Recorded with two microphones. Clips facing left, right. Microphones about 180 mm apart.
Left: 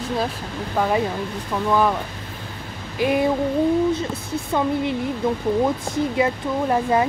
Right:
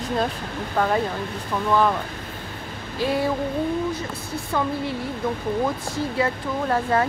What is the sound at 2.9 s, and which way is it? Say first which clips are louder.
Speech: left 4 dB; 15° left (ahead or behind).